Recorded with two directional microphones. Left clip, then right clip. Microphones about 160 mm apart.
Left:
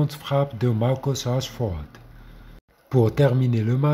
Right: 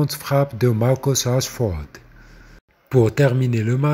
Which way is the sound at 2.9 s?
25° right (ahead or behind).